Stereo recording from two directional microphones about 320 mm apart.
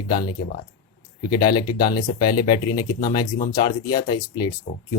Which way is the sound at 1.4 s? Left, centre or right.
Centre.